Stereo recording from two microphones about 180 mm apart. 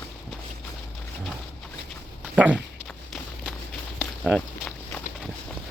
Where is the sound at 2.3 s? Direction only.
5° right (ahead or behind).